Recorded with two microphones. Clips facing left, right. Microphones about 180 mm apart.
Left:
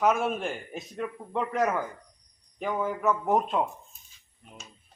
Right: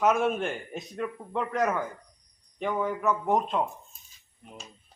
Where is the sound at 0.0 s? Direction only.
Centre (ahead or behind).